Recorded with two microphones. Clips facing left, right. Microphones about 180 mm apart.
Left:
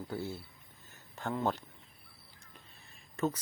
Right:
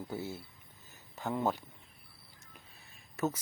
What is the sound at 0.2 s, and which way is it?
Speech, 20° right (ahead or behind).